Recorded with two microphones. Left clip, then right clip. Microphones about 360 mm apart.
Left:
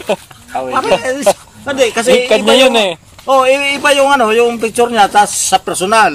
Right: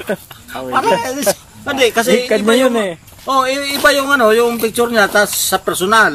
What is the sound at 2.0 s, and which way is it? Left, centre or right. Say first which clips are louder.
Speech: left 4 dB; left.